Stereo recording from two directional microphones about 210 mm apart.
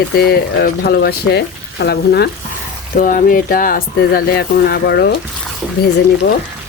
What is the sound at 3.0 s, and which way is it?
Speech, 40° left (ahead or behind).